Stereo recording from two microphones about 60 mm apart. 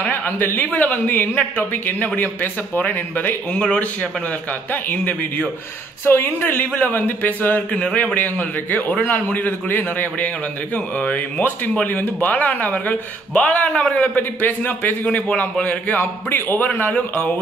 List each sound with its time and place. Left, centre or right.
0.0 s a man's voice: left
4.8 s a man's voice: left